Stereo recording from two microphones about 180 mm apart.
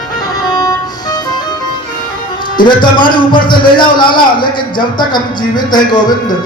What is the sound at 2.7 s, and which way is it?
A man's voice, 25° left (ahead or behind).